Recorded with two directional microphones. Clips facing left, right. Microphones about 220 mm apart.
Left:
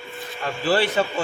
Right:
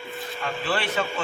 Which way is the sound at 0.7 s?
40° left (ahead or behind).